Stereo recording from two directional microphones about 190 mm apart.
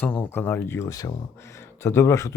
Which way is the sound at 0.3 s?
10° left (ahead or behind).